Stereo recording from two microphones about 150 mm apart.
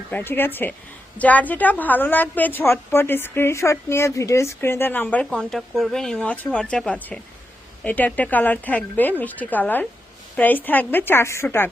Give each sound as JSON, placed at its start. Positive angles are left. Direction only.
{"t": 0.1, "sound": "a woman's voice", "side_deg": 15}